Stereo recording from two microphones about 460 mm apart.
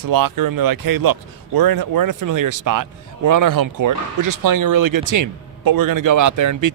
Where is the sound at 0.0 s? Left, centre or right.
Right.